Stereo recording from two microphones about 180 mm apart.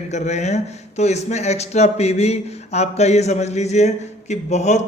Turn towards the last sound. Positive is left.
turn(degrees=40)  # may be behind; listen again after turning